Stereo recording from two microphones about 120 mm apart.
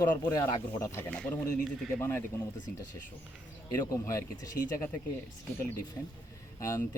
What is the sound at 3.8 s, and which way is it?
Speech, 25° left (ahead or behind).